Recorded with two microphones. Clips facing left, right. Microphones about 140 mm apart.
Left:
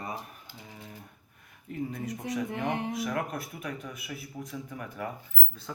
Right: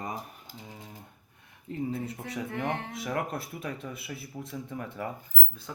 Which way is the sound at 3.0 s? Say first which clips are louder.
Even; 30° right (ahead or behind).